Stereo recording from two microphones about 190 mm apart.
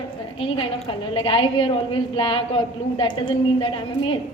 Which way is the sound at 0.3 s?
30° left (ahead or behind).